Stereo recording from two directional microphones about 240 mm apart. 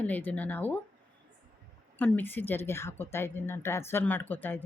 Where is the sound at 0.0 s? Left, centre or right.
Centre.